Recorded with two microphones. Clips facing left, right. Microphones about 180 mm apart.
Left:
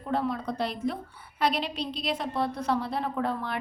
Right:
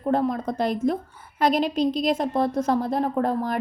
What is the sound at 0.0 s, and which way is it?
A woman's voice, 45° right (ahead or behind).